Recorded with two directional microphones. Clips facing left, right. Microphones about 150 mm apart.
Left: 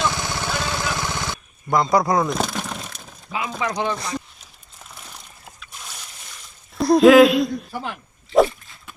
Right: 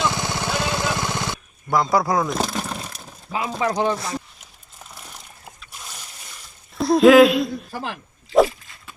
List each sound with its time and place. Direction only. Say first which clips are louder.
0.0 s a sound: right 1 dB; 20° right (ahead or behind)
1.7 s speech: left 1 dB; 5° right (ahead or behind)
3.3 s speech: right 3 dB; 35° right (ahead or behind)
3.9 s speech: even; 5° right (ahead or behind)
6.7 s speech: left 1 dB; centre (ahead or behind)
8.3 s wild animals: even; centre (ahead or behind)